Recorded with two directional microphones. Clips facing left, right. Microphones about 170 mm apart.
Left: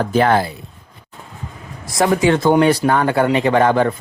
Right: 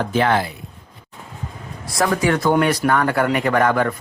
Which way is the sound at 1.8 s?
20° left (ahead or behind).